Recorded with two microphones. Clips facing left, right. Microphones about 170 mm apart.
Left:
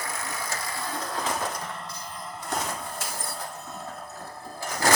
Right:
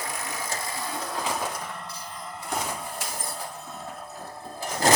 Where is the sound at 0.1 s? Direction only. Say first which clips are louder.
Even; 15° right (ahead or behind).